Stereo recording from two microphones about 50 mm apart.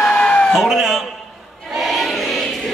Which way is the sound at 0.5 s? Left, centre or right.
Centre.